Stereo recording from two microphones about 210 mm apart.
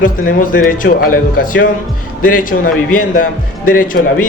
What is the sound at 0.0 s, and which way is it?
Speech, 40° left (ahead or behind).